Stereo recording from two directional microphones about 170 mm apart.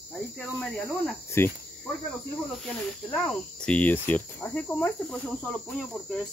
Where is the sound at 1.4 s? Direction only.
15° left (ahead or behind).